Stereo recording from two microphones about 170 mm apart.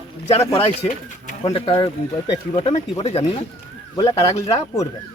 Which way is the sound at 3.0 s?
40° left (ahead or behind).